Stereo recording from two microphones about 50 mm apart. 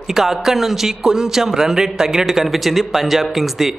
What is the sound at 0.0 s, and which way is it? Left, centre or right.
A man's voice, centre.